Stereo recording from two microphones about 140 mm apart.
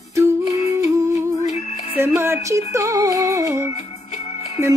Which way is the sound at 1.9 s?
15° right (ahead or behind).